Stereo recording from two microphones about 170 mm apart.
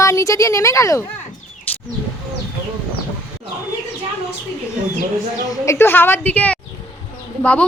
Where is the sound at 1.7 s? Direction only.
10° left (ahead or behind).